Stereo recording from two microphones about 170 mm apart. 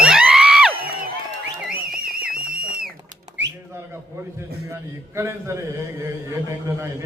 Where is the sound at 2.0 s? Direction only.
60° right (ahead or behind).